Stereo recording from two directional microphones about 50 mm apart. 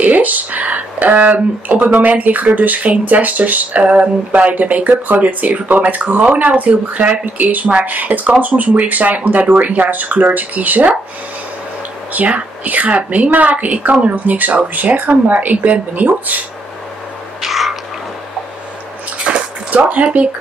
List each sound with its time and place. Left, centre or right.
0.0 s speech: right
12.1 s speech: right
17.4 s a sound: centre
19.3 s bathtub: right
19.7 s speech: right